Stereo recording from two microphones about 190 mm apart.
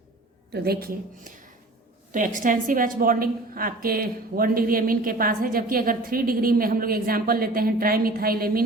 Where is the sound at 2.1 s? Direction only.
45° right (ahead or behind).